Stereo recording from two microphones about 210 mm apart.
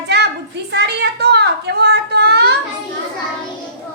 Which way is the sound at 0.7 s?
50° right (ahead or behind).